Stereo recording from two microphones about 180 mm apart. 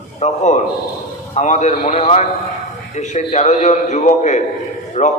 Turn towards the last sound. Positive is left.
turn(degrees=40)  # may be behind; listen again after turning